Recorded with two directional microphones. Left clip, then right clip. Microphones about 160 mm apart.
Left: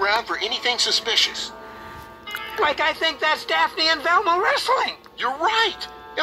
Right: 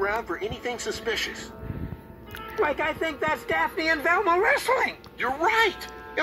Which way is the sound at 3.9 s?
30° right (ahead or behind).